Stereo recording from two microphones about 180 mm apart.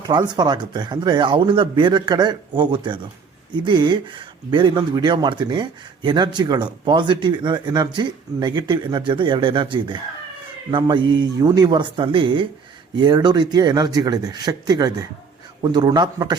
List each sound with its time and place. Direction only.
0.1 s speech: 25° right (ahead or behind)